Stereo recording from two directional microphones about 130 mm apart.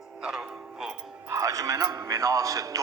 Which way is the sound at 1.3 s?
25° right (ahead or behind).